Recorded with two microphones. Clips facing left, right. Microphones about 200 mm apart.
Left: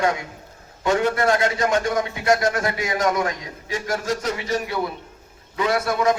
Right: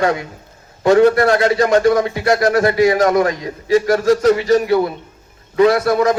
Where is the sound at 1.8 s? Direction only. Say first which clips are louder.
Right 9 dB; 75° right (ahead or behind).